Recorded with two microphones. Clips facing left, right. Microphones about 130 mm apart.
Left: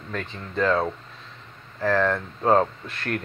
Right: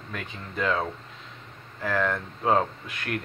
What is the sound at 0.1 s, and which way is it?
Speech, 40° left (ahead or behind).